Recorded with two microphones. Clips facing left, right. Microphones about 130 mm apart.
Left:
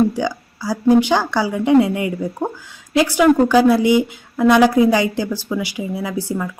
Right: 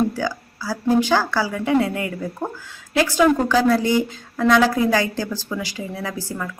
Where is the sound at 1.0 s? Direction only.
20° left (ahead or behind).